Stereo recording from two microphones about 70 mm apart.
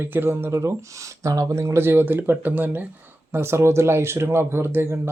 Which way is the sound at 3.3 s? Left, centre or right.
Right.